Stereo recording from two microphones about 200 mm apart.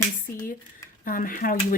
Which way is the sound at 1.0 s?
45° left (ahead or behind).